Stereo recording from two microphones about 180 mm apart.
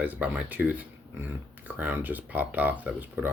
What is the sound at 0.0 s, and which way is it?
Speech, 10° right (ahead or behind).